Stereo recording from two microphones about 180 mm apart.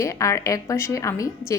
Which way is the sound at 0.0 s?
15° left (ahead or behind).